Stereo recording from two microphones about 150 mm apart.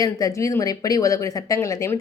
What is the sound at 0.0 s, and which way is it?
Speech, 25° left (ahead or behind).